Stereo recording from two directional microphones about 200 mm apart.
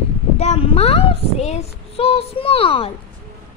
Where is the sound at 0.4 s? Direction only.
30° left (ahead or behind).